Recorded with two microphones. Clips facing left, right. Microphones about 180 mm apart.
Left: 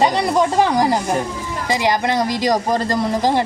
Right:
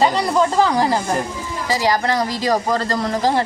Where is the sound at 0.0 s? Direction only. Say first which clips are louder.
Even; 15° left (ahead or behind).